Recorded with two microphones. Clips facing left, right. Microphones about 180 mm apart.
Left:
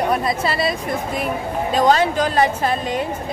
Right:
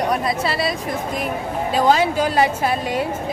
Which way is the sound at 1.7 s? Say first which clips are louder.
Left 1 dB; 5° right (ahead or behind).